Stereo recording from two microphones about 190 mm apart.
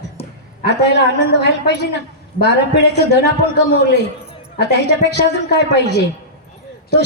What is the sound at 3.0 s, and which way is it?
A man's voice, 60° left (ahead or behind).